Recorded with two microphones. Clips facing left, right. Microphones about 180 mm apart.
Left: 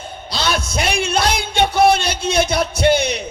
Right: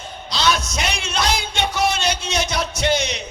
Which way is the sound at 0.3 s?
50° left (ahead or behind).